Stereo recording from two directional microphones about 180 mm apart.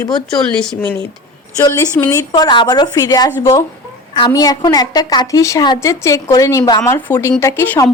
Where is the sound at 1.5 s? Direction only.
15° left (ahead or behind).